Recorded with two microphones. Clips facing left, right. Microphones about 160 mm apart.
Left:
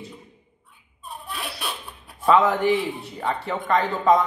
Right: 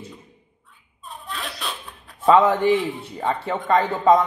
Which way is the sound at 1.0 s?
10° left (ahead or behind).